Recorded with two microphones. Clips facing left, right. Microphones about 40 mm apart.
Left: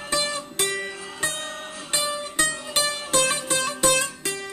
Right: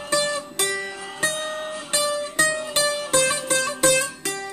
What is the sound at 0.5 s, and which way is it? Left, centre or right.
Music, left.